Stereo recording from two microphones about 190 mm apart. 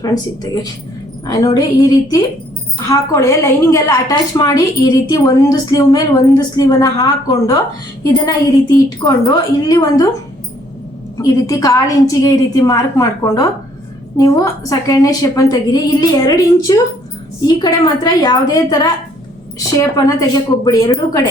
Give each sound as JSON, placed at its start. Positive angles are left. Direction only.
{"t": 0.0, "sound": "a woman's voice", "side_deg": 20}
{"t": 11.2, "sound": "a woman's voice", "side_deg": 15}
{"t": 20.1, "sound": "a woman's voice", "side_deg": 20}